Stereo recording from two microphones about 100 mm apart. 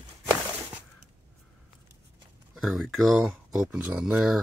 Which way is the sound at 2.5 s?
Centre (ahead or behind).